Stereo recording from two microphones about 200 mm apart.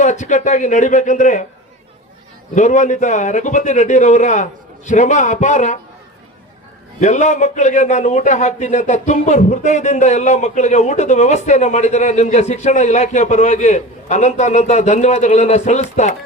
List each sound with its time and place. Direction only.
0.0 s a man's voice: 40° left (ahead or behind)
2.6 s a man's voice: 35° left (ahead or behind)
7.0 s a man's voice: 35° left (ahead or behind)